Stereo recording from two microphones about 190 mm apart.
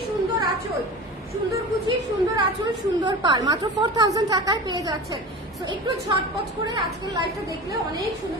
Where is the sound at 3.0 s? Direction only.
25° right (ahead or behind).